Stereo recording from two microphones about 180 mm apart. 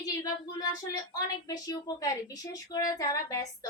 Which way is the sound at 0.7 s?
20° left (ahead or behind).